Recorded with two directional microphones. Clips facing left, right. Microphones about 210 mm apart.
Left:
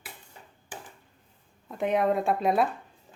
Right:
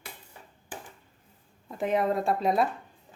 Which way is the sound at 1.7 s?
Centre (ahead or behind).